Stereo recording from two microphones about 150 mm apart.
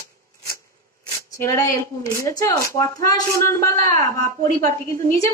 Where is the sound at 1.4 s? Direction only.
20° left (ahead or behind).